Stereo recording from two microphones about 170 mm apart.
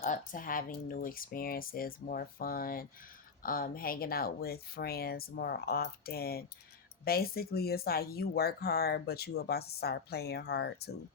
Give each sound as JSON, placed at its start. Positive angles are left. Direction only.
{"t": 0.0, "sound": "speech", "side_deg": 50}